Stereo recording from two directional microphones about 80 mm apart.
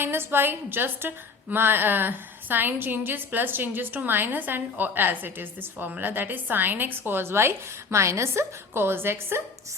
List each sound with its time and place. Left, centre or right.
0.0 s a woman's voice: right